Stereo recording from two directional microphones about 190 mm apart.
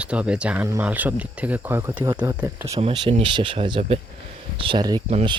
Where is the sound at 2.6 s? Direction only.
30° right (ahead or behind).